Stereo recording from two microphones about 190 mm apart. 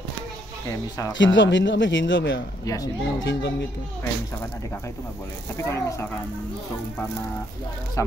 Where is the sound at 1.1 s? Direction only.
75° left (ahead or behind).